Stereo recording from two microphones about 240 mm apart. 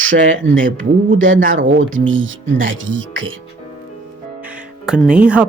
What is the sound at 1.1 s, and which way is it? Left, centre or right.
Speech, right.